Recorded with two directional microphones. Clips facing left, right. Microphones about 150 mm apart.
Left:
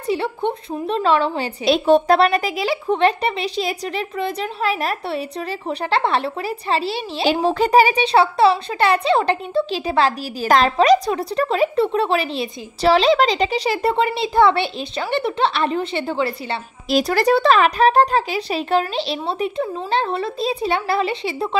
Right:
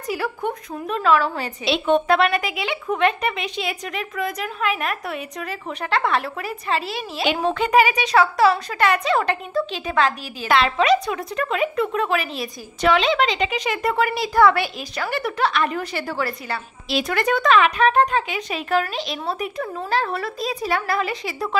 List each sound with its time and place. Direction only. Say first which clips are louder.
0.0 s speech: left 4 dB; 25° left (ahead or behind)
1.6 s a woman's voice: left 5 dB; 40° left (ahead or behind); by 16.5 s 25° left (ahead or behind)
16.9 s speech: left 5 dB; 35° left (ahead or behind)